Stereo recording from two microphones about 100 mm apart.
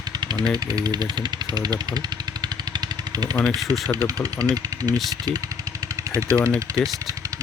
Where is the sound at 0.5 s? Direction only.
40° right (ahead or behind).